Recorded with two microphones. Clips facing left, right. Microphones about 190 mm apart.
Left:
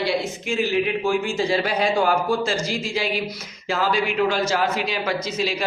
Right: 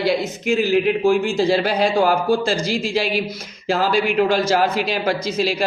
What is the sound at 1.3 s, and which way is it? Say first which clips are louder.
Speech: right 4 dB; 35° right (ahead or behind).